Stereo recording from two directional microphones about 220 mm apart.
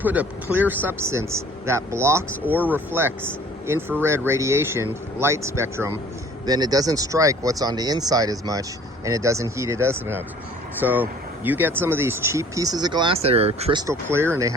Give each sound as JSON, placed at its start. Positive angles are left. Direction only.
{"t": 0.0, "sound": "speech", "side_deg": -5}
{"t": 13.8, "sound": "speech", "side_deg": -10}